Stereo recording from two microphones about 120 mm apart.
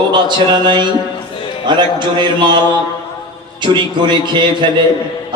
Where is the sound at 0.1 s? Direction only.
40° right (ahead or behind).